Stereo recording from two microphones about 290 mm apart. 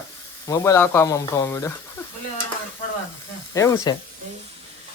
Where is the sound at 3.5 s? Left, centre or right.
Centre.